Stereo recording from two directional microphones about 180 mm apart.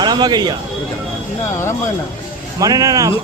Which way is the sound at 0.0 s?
25° right (ahead or behind).